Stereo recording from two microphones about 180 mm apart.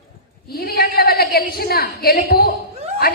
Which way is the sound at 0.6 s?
60° left (ahead or behind).